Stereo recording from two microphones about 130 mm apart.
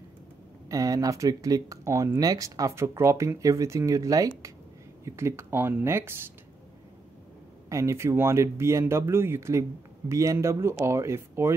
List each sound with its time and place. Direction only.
0.7 s speech: 25° right (ahead or behind)
7.7 s speech: 20° right (ahead or behind)